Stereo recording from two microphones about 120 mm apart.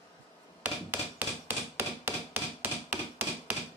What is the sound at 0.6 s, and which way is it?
Hammer, 15° right (ahead or behind).